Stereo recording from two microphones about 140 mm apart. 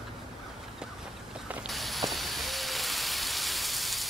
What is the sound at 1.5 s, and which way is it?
Steam, centre (ahead or behind).